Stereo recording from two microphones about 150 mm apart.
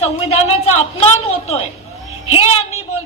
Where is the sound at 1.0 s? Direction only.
45° left (ahead or behind).